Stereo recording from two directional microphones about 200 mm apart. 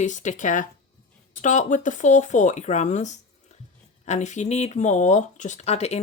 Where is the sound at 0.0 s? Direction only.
35° left (ahead or behind).